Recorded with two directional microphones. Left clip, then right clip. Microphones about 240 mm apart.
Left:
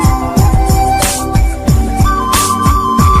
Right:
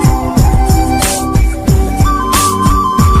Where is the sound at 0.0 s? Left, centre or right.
Centre.